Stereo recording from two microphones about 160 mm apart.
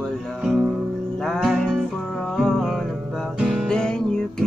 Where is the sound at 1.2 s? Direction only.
5° left (ahead or behind).